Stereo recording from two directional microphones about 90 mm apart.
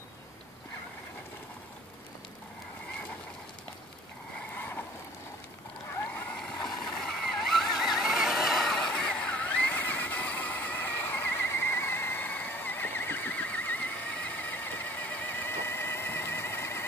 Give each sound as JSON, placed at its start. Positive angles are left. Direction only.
{"t": 4.6, "sound": "vehicle", "side_deg": 20}
{"t": 6.3, "sound": "vehicle", "side_deg": 10}